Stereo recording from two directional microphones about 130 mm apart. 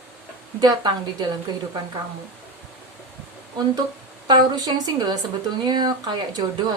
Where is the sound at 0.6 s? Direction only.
30° right (ahead or behind).